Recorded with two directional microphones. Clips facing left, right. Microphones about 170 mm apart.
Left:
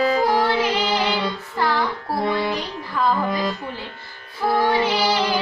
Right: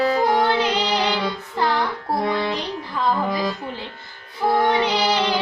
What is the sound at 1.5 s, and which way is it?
Music, 20° right (ahead or behind).